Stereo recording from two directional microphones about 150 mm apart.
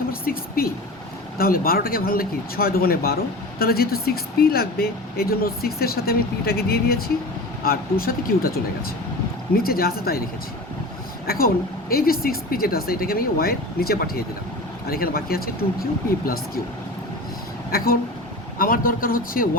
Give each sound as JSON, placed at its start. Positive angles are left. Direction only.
{"t": 0.1, "sound": "a woman's voice", "side_deg": 80}
{"t": 7.6, "sound": "speech", "side_deg": 75}
{"t": 9.6, "sound": "speech", "side_deg": 85}
{"t": 11.3, "sound": "speech", "side_deg": 85}
{"t": 17.7, "sound": "speech", "side_deg": 85}
{"t": 18.6, "sound": "a man's voice", "side_deg": 70}